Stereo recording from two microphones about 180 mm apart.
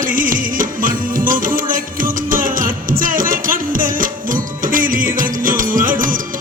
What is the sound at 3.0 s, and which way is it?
Music, 50° right (ahead or behind).